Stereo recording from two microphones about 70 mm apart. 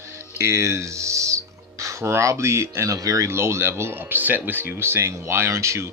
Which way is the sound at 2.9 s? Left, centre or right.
Right.